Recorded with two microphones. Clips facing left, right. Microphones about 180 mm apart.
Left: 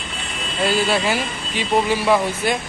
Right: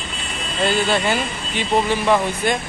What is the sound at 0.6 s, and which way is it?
Speech, 5° left (ahead or behind).